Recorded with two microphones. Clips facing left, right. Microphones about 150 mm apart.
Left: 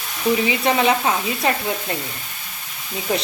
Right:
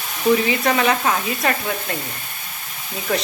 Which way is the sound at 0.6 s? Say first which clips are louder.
Left 1 dB; 25° left (ahead or behind).